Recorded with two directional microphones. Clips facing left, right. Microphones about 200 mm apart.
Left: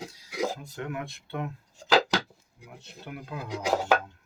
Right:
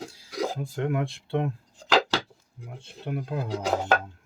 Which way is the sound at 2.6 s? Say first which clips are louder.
Right 6 dB; 25° right (ahead or behind).